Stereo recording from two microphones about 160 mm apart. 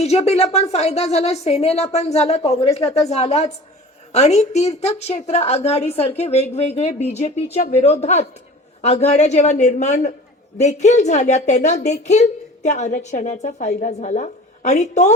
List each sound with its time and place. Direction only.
0.0 s a woman's voice: 40° left (ahead or behind)